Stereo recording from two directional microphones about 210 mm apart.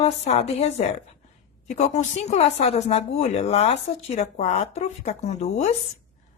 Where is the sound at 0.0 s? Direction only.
30° left (ahead or behind).